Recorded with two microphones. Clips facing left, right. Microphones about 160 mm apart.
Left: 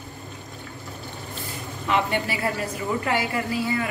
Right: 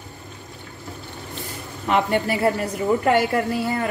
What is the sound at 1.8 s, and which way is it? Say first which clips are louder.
A woman's voice: right 4 dB; 40° right (ahead or behind).